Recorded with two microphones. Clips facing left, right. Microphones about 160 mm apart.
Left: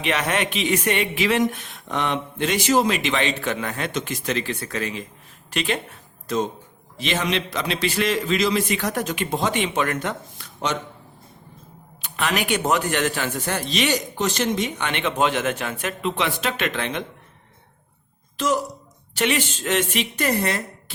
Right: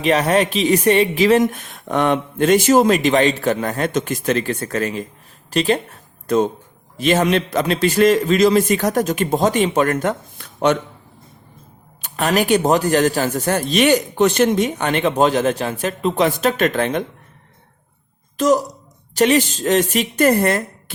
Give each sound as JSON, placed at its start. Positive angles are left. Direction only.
{"t": 0.0, "sound": "a man's voice", "side_deg": -35}
{"t": 6.2, "sound": "speech", "side_deg": -55}
{"t": 12.0, "sound": "a man's voice", "side_deg": -40}
{"t": 18.3, "sound": "a man's voice", "side_deg": -40}